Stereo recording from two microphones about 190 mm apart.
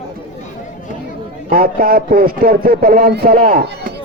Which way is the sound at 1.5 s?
50° right (ahead or behind).